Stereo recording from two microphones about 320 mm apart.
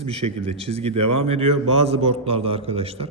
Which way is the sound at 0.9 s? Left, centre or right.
Right.